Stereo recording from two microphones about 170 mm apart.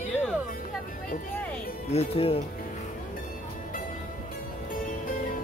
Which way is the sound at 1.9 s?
35° left (ahead or behind).